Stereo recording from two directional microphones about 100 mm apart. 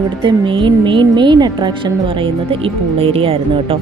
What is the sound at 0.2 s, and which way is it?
A woman's voice, 55° right (ahead or behind).